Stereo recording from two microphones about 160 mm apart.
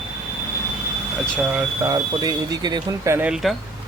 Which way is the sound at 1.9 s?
25° right (ahead or behind).